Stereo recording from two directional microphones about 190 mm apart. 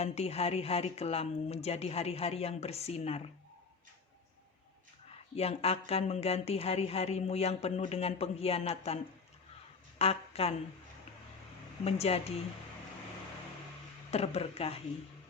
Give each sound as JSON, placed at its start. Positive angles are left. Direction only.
{"t": 0.0, "sound": "a woman's voice", "side_deg": 35}
{"t": 5.4, "sound": "a woman's voice", "side_deg": 30}
{"t": 10.0, "sound": "a woman's voice", "side_deg": 30}
{"t": 11.9, "sound": "a woman's voice", "side_deg": 35}
{"t": 14.1, "sound": "a woman's voice", "side_deg": 35}